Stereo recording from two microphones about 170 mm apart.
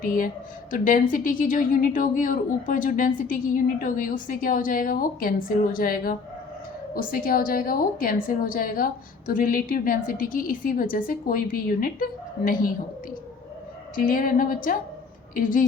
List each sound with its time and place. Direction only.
0.0 s a woman's voice: 55° left (ahead or behind)
13.9 s a woman's voice: 55° left (ahead or behind)